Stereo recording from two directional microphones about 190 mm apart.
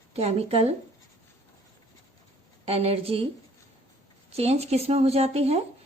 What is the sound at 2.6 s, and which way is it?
Speech, 30° right (ahead or behind).